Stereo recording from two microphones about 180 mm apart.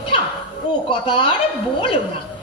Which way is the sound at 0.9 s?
30° left (ahead or behind).